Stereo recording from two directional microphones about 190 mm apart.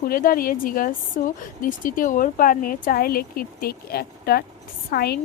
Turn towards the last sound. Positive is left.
turn(degrees=55)  # may be behind; listen again after turning